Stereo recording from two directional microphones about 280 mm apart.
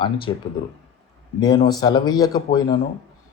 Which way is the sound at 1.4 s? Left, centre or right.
Centre.